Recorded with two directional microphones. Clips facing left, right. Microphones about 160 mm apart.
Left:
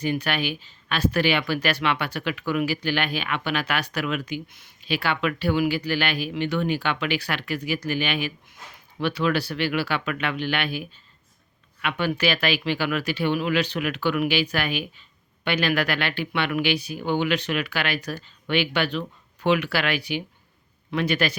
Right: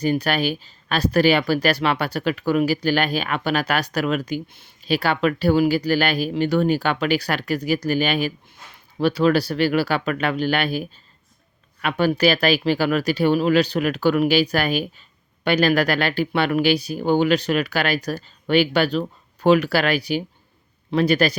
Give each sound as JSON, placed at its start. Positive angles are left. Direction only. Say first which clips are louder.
{"t": 0.0, "sound": "speech", "louder": "right 5 dB", "side_deg": -40}